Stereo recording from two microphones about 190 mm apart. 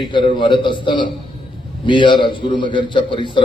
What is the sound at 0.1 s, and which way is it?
A man's voice, 25° left (ahead or behind).